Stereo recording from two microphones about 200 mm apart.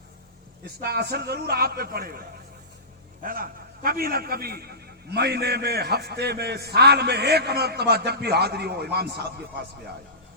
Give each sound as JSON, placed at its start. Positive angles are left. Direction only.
{"t": 0.8, "sound": "a man's voice", "side_deg": -55}
{"t": 3.2, "sound": "a man's voice", "side_deg": -45}